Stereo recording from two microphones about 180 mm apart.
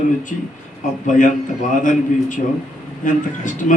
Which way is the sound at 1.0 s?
45° left (ahead or behind).